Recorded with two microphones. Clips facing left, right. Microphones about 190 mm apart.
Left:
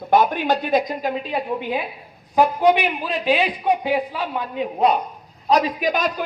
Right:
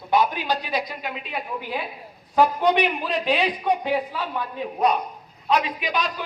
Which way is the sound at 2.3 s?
10° left (ahead or behind).